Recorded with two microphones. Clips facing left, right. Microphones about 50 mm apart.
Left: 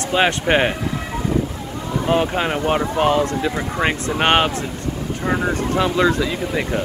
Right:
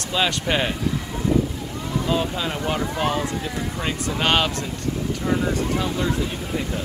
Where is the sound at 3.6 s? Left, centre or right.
Left.